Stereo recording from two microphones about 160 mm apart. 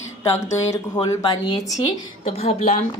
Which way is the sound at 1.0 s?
25° left (ahead or behind).